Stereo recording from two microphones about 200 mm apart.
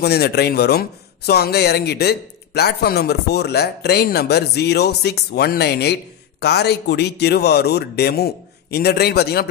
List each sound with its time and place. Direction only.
0.0 s speech: 55° left (ahead or behind)